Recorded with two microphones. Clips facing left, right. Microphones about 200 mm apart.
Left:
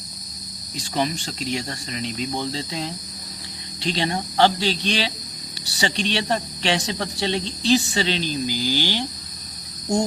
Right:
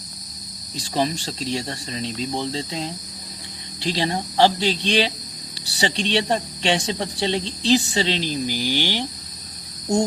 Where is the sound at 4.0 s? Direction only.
25° right (ahead or behind).